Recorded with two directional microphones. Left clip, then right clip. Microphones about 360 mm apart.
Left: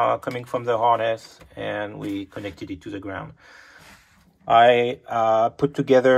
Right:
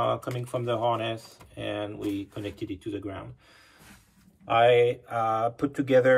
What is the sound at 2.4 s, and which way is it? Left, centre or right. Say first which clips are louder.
Speech: left 2 dB; left.